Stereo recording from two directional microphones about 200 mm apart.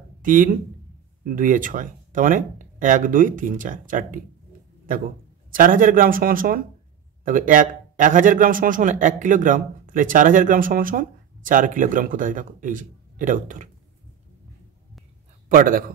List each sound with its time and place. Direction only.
0.2 s speech: 40° right (ahead or behind)
5.5 s a man's voice: 45° right (ahead or behind)
15.4 s a man's voice: 45° right (ahead or behind)